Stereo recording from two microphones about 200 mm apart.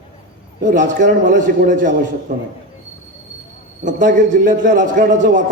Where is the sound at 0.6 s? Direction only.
40° right (ahead or behind).